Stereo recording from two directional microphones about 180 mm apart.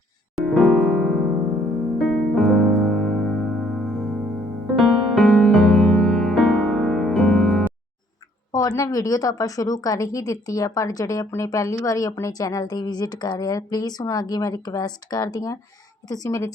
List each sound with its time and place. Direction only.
0.4 s electric piano: centre (ahead or behind)
2.0 s music: centre (ahead or behind)
8.5 s speech: 20° left (ahead or behind)